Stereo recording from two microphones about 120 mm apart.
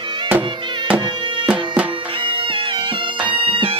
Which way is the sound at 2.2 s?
45° right (ahead or behind).